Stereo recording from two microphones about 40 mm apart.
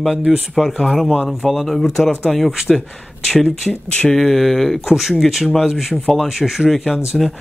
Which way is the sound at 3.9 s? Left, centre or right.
Left.